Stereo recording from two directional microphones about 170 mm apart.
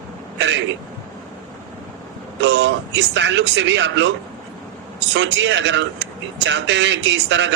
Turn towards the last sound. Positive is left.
turn(degrees=-90)